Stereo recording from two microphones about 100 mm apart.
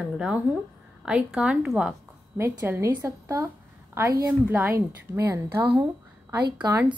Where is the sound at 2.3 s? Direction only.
25° right (ahead or behind).